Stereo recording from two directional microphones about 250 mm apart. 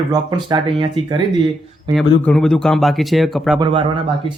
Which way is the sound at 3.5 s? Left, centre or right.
Centre.